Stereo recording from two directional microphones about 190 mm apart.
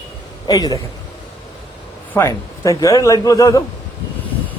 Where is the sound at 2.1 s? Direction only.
15° left (ahead or behind).